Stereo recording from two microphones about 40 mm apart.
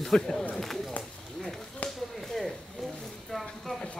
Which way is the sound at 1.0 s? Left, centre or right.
Centre.